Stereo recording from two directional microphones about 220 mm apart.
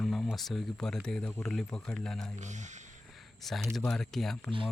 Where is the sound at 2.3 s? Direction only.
35° right (ahead or behind).